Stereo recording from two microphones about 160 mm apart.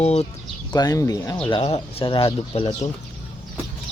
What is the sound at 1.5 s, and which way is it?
Speech, 35° left (ahead or behind).